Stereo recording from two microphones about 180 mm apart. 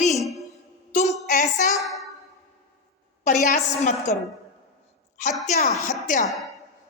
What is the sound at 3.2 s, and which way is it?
Speech, 40° left (ahead or behind).